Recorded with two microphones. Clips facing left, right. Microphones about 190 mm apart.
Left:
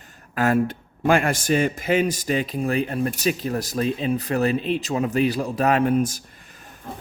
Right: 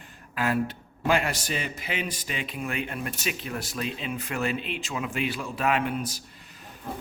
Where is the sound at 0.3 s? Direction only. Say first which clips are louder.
Left 6 dB; 45° left (ahead or behind).